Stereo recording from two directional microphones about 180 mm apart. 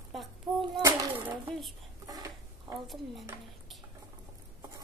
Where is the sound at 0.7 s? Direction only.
20° right (ahead or behind).